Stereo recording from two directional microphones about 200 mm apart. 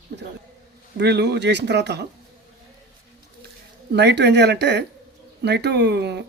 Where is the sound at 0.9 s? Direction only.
55° right (ahead or behind).